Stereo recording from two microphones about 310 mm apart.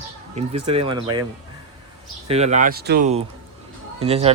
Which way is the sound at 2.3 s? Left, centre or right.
Right.